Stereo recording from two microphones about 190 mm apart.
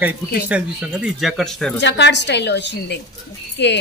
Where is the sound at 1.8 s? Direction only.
70° left (ahead or behind).